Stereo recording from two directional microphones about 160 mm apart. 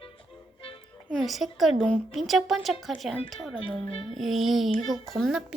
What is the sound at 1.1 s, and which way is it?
A woman's voice, centre (ahead or behind).